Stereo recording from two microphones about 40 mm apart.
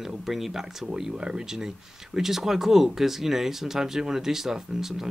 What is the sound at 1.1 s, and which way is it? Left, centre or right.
Speech, right.